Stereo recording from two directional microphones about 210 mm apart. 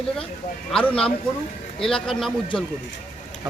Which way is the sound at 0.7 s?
5° left (ahead or behind).